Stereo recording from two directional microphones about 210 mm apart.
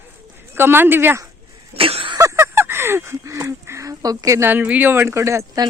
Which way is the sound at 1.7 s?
25° right (ahead or behind).